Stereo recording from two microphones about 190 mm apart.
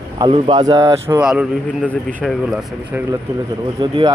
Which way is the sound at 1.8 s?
5° left (ahead or behind).